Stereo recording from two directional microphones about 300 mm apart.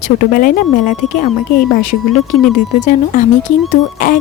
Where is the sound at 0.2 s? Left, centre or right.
Left.